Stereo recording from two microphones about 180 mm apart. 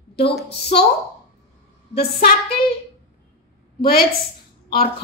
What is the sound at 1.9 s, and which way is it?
Speech, 60° left (ahead or behind).